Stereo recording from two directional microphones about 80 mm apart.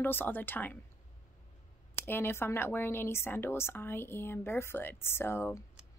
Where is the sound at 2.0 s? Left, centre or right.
Left.